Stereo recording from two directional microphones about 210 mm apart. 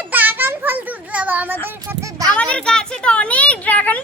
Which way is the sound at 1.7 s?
15° right (ahead or behind).